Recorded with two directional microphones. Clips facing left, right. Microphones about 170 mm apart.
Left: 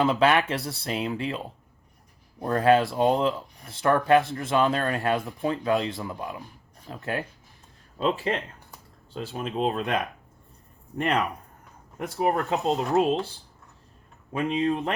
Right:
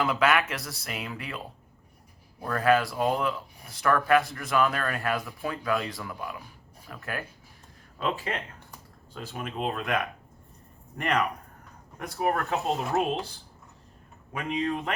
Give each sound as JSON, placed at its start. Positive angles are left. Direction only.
{"t": 0.0, "sound": "speech", "side_deg": 30}
{"t": 14.3, "sound": "speech", "side_deg": 30}